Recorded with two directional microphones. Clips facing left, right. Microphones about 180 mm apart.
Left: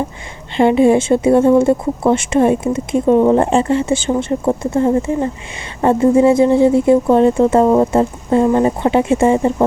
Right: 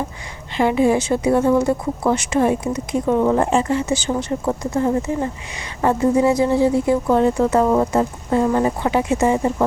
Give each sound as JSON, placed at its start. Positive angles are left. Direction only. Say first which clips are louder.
{"t": 0.5, "sound": "a woman's voice", "louder": "left 5 dB", "side_deg": 25}